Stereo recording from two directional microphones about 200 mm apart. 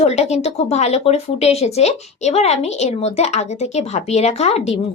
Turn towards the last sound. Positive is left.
turn(degrees=30)  # may be behind; listen again after turning